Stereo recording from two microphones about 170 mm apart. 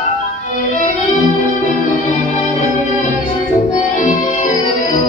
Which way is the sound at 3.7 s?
45° left (ahead or behind).